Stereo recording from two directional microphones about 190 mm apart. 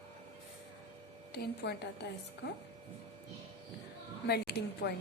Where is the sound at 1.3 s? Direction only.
60° left (ahead or behind).